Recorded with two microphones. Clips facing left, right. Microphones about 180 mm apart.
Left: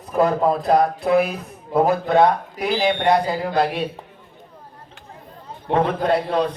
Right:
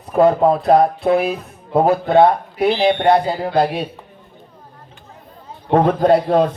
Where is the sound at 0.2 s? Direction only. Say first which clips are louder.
Right 5 dB; 30° right (ahead or behind).